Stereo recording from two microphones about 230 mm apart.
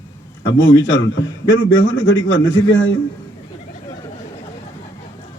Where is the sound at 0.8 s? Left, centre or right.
Left.